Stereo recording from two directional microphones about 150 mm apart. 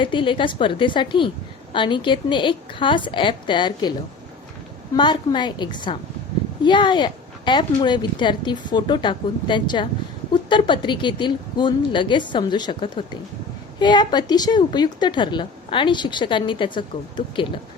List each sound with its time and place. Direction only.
0.0 s a woman's voice: 35° left (ahead or behind)
4.9 s a woman's voice: 30° left (ahead or behind)